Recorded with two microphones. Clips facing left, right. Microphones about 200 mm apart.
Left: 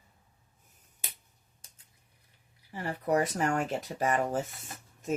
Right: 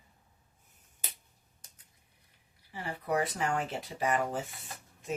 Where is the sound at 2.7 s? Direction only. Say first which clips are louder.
Left 4 dB; 45° left (ahead or behind).